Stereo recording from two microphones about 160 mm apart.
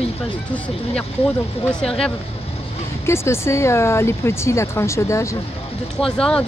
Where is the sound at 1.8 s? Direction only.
5° left (ahead or behind).